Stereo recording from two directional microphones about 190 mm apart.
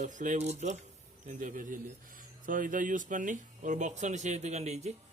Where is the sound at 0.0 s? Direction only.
40° right (ahead or behind).